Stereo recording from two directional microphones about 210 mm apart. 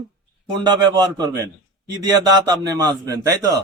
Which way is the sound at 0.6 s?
20° right (ahead or behind).